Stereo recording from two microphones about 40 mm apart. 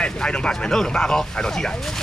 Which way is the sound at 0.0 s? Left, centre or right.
Left.